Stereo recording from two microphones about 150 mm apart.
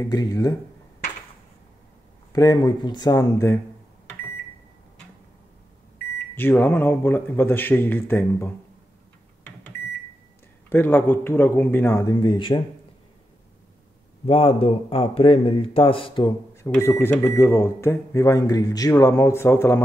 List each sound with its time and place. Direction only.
0.0 s speech: 25° left (ahead or behind)
2.3 s speech: 25° left (ahead or behind)
6.3 s a man's voice: 15° left (ahead or behind)
10.7 s a man's voice: 15° left (ahead or behind); by 12.6 s 35° left (ahead or behind)
14.2 s a man's voice: 40° left (ahead or behind)
16.6 s speech: 15° left (ahead or behind)